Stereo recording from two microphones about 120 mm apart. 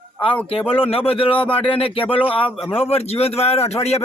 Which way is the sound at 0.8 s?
50° left (ahead or behind).